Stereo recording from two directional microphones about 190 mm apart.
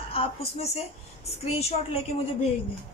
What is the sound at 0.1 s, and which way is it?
A woman's voice, 30° left (ahead or behind).